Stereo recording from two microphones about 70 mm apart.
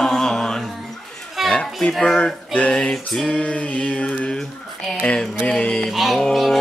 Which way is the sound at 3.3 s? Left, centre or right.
Left.